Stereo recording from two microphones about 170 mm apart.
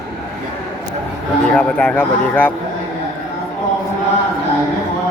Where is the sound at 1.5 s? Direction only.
5° left (ahead or behind).